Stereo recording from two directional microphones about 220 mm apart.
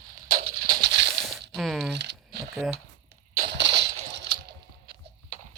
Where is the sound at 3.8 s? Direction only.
50° right (ahead or behind).